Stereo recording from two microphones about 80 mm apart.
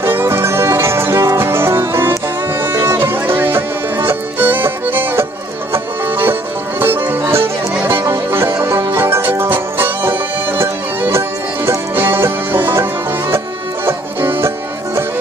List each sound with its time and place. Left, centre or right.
0.0 s music: right
13.8 s music: right